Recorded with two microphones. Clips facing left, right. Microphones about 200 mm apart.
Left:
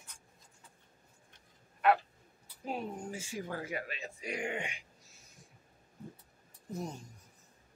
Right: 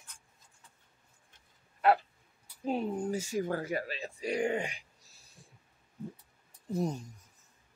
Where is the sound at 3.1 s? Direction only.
40° right (ahead or behind).